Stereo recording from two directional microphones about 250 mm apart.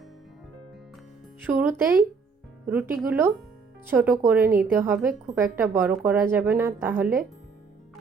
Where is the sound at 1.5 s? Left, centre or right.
Centre.